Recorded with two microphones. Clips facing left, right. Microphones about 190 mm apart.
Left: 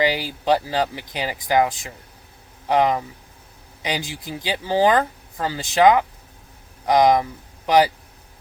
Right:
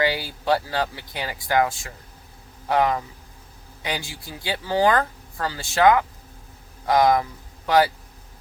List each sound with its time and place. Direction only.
0.0 s speech: 15° left (ahead or behind)